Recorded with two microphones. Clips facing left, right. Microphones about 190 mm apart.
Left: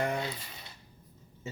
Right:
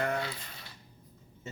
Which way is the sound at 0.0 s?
15° left (ahead or behind).